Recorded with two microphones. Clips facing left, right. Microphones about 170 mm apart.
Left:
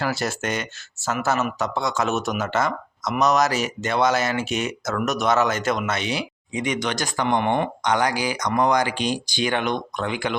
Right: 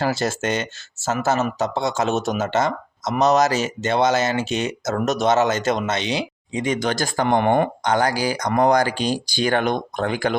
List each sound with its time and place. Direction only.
0.0 s speech: 25° right (ahead or behind); by 7.7 s 45° right (ahead or behind)
7.9 s speech: 35° right (ahead or behind)